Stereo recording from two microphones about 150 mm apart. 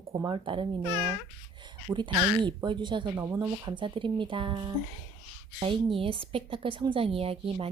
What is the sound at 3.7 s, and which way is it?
A woman's voice, 30° right (ahead or behind).